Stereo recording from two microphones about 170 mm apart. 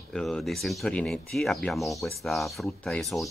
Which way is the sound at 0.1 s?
Centre (ahead or behind).